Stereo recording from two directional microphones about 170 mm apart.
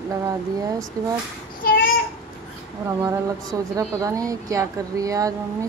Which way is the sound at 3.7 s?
20° right (ahead or behind).